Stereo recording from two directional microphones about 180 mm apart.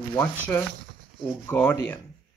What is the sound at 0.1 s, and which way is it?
Speech, 15° left (ahead or behind).